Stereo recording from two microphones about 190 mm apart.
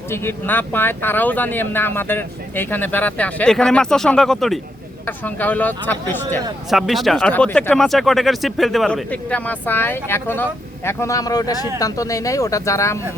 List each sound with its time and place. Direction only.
0.1 s speech: 10° left (ahead or behind)
6.7 s speech: centre (ahead or behind); by 13.0 s 15° left (ahead or behind)